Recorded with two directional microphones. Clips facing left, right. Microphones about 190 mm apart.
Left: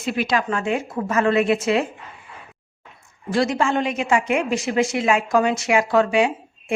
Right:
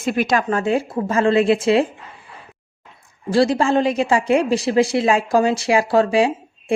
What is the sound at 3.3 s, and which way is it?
A woman's voice, 30° right (ahead or behind).